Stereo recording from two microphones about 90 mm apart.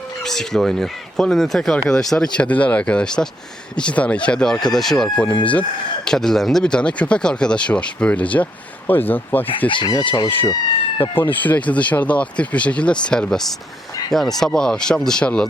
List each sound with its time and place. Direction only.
0.2 s speech: 5° left (ahead or behind)
5.2 s speech: 15° left (ahead or behind)
9.6 s speech: 65° left (ahead or behind)
11.1 s speech: 20° left (ahead or behind)